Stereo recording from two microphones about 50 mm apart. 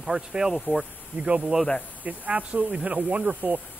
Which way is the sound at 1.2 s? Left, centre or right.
Right.